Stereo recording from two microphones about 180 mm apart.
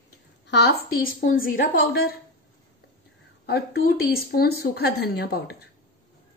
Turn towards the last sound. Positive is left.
turn(degrees=65)  # may be behind; listen again after turning